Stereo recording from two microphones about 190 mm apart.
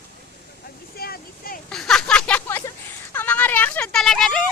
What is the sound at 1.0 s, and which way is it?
Vehicle, 55° left (ahead or behind).